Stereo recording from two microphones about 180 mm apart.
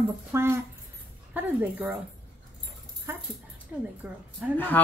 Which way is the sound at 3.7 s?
10° right (ahead or behind).